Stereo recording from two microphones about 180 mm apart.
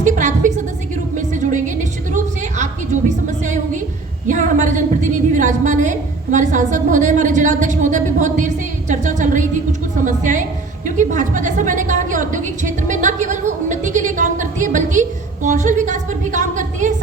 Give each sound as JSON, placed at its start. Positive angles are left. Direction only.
{"t": 0.0, "sound": "music", "side_deg": -45}
{"t": 4.3, "sound": "a woman's voice", "side_deg": -45}